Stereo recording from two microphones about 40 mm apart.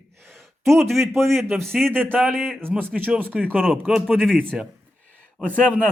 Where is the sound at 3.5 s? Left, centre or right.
Right.